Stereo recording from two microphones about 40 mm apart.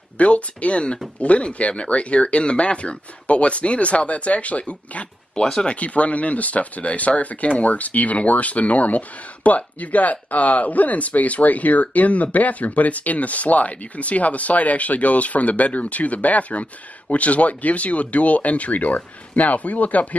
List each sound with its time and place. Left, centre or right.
0.2 s speech: left
5.3 s speech: centre
5.7 s speech: left